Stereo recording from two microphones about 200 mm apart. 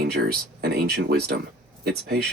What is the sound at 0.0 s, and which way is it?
Speech, 50° right (ahead or behind).